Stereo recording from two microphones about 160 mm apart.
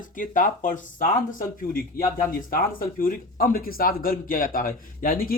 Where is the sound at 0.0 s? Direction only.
55° left (ahead or behind).